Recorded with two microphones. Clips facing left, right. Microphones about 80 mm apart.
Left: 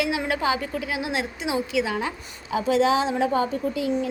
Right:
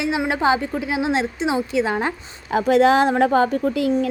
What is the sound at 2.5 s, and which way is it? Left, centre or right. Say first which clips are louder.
A woman's voice: right 5 dB; right.